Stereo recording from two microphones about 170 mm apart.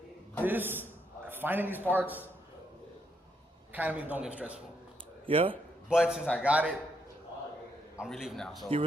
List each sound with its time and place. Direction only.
0.4 s a man's voice: 10° right (ahead or behind)
3.7 s a man's voice: 10° right (ahead or behind)
5.2 s speech: 30° right (ahead or behind)
5.9 s a man's voice: 5° right (ahead or behind)
8.0 s a man's voice: centre (ahead or behind)